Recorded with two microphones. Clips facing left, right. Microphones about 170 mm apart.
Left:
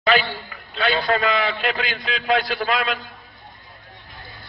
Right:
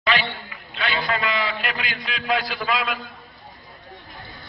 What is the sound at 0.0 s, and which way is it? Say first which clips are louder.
A man's voice: left 4 dB; 45° left (ahead or behind).